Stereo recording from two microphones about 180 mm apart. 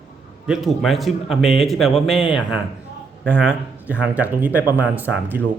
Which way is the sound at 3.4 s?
5° right (ahead or behind).